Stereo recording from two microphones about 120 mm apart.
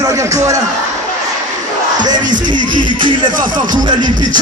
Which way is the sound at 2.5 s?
40° right (ahead or behind).